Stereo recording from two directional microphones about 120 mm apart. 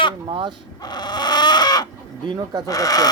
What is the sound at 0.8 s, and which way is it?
Chicken, 35° left (ahead or behind).